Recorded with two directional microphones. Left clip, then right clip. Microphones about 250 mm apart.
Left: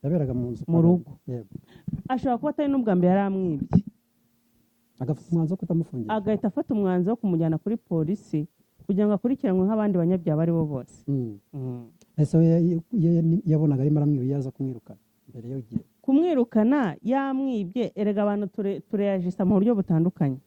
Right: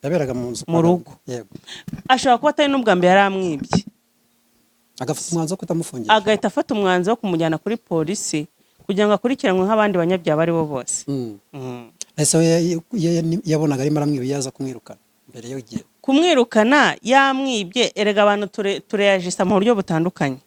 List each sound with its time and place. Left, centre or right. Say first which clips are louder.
0.0 s speech: right 7 dB; centre
4.9 s speech: right 8 dB; centre
5.5 s speech: right 5 dB; right
5.9 s speech: right 13 dB; centre
11.0 s speech: right 4 dB; right
11.5 s speech: right 6 dB; centre